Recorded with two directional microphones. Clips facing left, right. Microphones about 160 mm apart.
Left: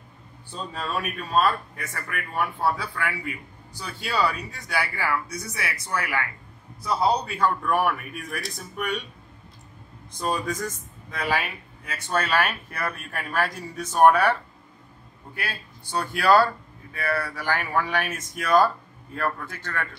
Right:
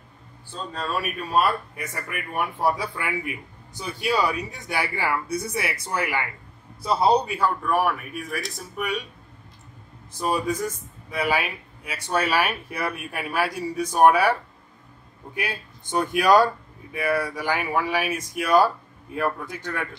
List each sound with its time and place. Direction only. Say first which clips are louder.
0.6 s a man's voice: right 1 dB; 5° left (ahead or behind); by 7.2 s 25° right (ahead or behind)
7.2 s speech: even; 5° right (ahead or behind)
10.1 s speech: right 3 dB; 5° right (ahead or behind)